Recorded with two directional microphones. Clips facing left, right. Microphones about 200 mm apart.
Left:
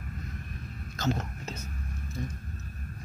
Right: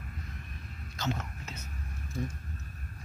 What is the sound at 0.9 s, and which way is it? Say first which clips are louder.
Whispering: left 4 dB; 40° left (ahead or behind).